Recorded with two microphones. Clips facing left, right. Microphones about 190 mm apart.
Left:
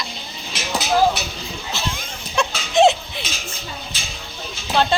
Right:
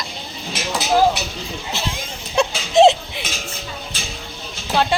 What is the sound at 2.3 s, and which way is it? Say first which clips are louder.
Baby laughter: right 3 dB; 35° right (ahead or behind).